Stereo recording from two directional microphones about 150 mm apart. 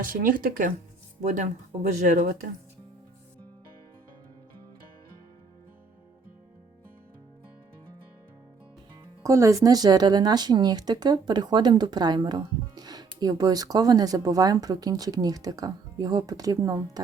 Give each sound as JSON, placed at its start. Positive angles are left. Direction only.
{"t": 0.0, "sound": "speech", "side_deg": -65}
{"t": 9.2, "sound": "speech", "side_deg": -20}